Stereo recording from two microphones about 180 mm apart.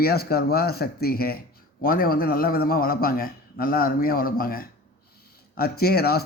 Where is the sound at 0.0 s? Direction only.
60° left (ahead or behind).